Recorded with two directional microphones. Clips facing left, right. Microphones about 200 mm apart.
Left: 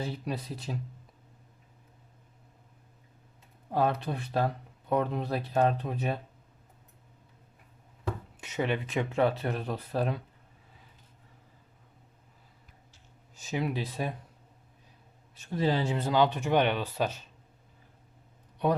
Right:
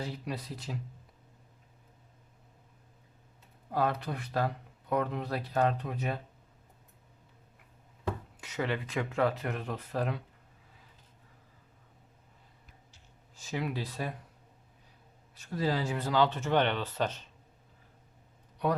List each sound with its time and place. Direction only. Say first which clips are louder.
0.0 s speech: left 3 dB; 30° left (ahead or behind)
3.7 s speech: left 3 dB; 25° left (ahead or behind)
8.4 s speech: left 5 dB; 20° left (ahead or behind)
13.3 s speech: left 3 dB; 20° left (ahead or behind)
15.4 s speech: left 3 dB; 25° left (ahead or behind); by 17.2 s 10° left (ahead or behind)